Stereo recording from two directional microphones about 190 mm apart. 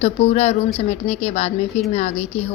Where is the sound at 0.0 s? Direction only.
35° left (ahead or behind).